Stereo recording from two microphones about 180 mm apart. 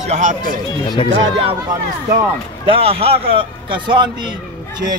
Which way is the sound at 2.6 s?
30° right (ahead or behind).